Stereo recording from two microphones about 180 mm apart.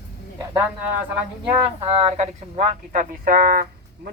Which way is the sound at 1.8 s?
30° right (ahead or behind).